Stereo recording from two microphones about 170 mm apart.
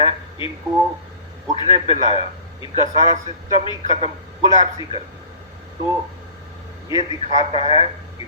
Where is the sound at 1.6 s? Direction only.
30° left (ahead or behind).